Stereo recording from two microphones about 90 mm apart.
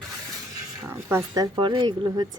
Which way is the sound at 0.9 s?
30° right (ahead or behind).